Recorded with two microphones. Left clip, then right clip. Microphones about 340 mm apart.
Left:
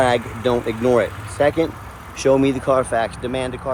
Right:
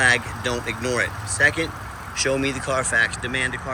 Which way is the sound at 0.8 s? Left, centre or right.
Left.